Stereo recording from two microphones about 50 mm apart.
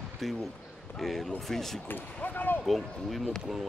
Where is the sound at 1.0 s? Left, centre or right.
Centre.